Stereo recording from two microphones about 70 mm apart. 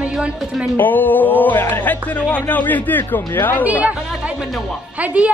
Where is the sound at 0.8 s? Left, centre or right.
Left.